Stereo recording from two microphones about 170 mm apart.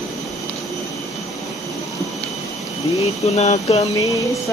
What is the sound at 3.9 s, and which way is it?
Speech, 20° left (ahead or behind).